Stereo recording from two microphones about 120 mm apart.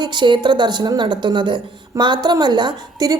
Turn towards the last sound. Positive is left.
turn(degrees=-35)  # may be behind; listen again after turning